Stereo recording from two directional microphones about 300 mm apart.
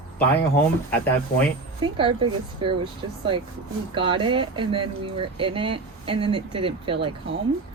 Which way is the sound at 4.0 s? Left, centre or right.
Centre.